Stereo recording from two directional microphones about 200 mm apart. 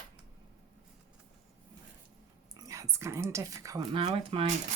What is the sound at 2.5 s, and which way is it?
Speech, 15° right (ahead or behind).